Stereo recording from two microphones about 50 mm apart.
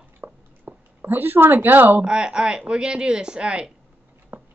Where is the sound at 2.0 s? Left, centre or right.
Centre.